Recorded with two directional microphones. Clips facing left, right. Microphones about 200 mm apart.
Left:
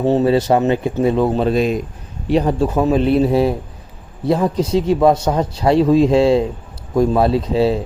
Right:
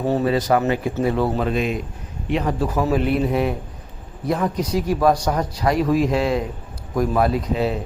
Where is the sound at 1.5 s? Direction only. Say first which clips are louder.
Left 6 dB; 35° left (ahead or behind).